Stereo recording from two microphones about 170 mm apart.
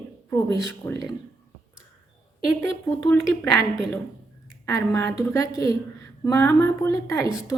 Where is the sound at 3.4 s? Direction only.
10° left (ahead or behind).